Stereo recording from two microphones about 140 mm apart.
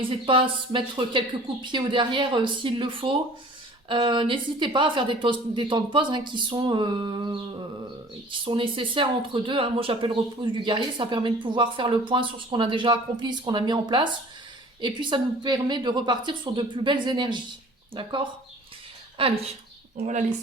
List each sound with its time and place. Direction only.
0.0 s speech: 40° right (ahead or behind)
8.4 s speech: 40° right (ahead or behind)